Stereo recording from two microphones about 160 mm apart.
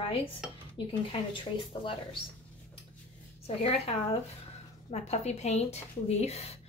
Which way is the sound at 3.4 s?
40° left (ahead or behind).